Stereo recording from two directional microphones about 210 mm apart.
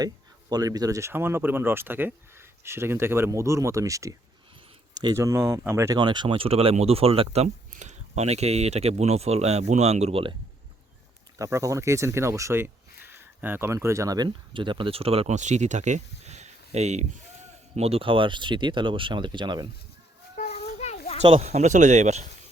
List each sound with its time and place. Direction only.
0.5 s speech: 20° right (ahead or behind)
11.3 s speech: 15° right (ahead or behind)
20.3 s children playing: 40° left (ahead or behind)
21.2 s speech: 30° right (ahead or behind)